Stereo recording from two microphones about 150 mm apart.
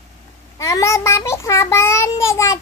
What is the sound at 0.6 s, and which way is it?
Child singing, 20° left (ahead or behind).